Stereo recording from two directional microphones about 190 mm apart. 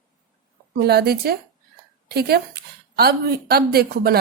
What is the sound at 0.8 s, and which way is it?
Speech, 55° right (ahead or behind).